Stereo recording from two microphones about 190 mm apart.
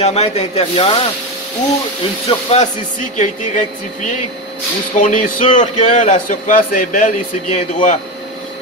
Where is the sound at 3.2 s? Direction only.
40° left (ahead or behind).